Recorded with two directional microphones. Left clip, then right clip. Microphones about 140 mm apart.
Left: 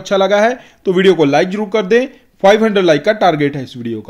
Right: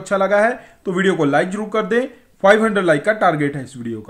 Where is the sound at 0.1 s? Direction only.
30° left (ahead or behind).